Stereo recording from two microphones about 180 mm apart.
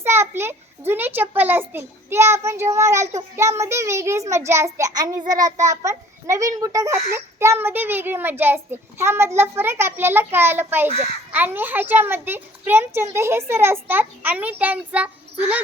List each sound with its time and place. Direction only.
0.0 s a child's voice: 15° right (ahead or behind)